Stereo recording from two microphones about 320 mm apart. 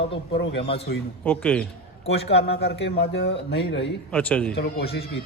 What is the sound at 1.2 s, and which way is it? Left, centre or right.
Speech, centre.